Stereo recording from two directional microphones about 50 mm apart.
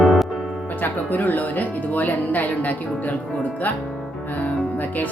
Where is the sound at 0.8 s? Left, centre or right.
Left.